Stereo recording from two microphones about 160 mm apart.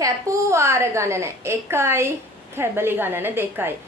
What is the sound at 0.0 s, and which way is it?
A woman's voice, 20° right (ahead or behind).